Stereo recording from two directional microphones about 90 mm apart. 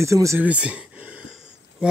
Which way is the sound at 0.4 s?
15° right (ahead or behind).